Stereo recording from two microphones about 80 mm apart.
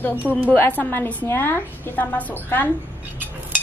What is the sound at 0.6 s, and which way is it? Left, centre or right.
A woman's voice, left.